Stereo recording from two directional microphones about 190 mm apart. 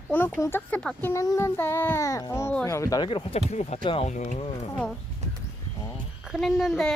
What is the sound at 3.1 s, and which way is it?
Speech, 30° left (ahead or behind).